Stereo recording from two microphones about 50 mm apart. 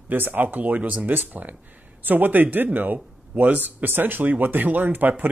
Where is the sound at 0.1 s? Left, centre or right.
Right.